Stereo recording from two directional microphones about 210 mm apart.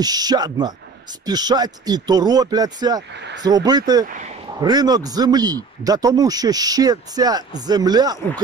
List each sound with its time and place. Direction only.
0.0 s a man's voice: 20° right (ahead or behind)